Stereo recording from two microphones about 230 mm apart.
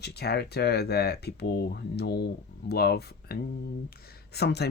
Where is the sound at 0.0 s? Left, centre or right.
Left.